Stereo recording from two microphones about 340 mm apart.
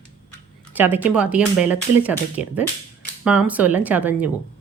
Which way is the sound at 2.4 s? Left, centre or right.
Centre.